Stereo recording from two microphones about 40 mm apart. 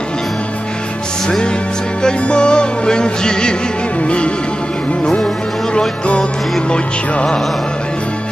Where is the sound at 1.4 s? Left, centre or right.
Left.